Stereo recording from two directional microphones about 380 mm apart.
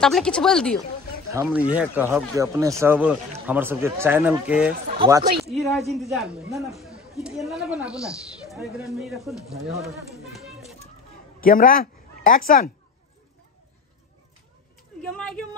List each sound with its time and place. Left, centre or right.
0.0 s speech: centre
11.4 s speech: left
15.0 s a sound: centre